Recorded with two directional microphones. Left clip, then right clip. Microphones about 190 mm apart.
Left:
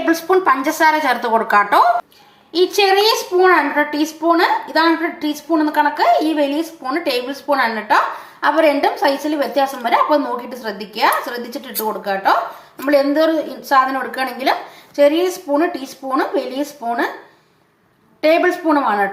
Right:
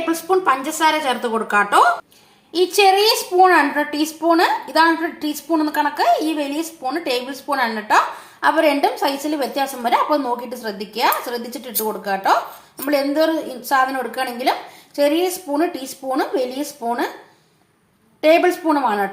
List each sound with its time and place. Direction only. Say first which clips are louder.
0.1 s a woman's voice: left 3 dB; 15° left (ahead or behind)
11.7 s speech: left 2 dB; 25° left (ahead or behind)
12.0 s a woman's voice: left 1 dB; 10° left (ahead or behind)
18.2 s a woman's voice: even; 10° left (ahead or behind)